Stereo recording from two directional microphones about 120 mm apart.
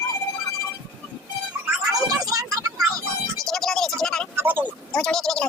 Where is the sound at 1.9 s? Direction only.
30° right (ahead or behind).